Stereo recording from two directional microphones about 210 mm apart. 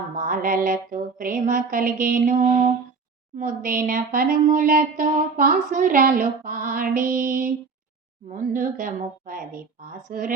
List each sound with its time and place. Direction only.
0.2 s speech: 40° right (ahead or behind)